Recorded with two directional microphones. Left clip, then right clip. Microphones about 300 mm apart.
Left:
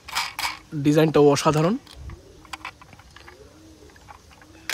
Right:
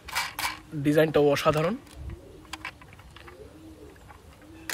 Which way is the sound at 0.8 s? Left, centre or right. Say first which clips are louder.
Left 4 dB; centre.